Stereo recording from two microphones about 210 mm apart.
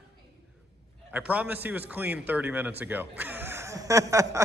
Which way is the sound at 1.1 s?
5° right (ahead or behind).